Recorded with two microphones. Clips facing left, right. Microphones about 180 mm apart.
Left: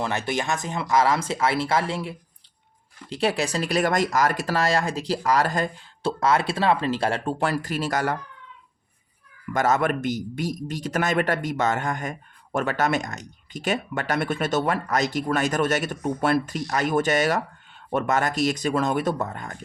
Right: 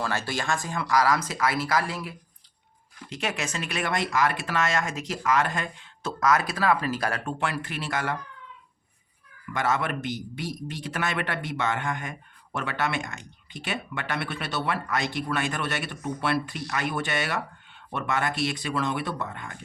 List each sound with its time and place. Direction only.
0.0 s speech: 20° left (ahead or behind); by 8.1 s 40° left (ahead or behind)
9.5 s a man's voice: 45° left (ahead or behind)